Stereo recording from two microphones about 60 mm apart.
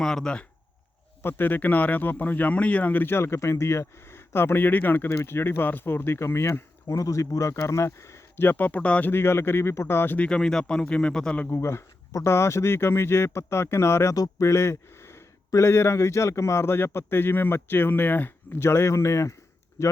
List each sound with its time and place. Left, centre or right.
0.0 s speech: centre
1.2 s speech: left
6.8 s speech: left
8.4 s speech: left
9.0 s speech: left
10.2 s speech: centre
11.4 s a man's voice: left
18.6 s a man's voice: left